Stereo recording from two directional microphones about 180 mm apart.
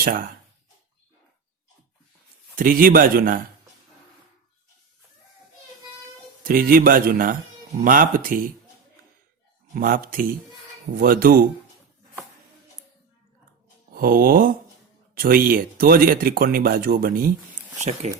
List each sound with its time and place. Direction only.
0.0 s speech: 50° right (ahead or behind)
2.6 s speech: 50° right (ahead or behind)
6.4 s speech: 50° right (ahead or behind)
9.7 s speech: 55° right (ahead or behind)
13.9 s speech: 55° right (ahead or behind)
17.7 s speech: 40° right (ahead or behind)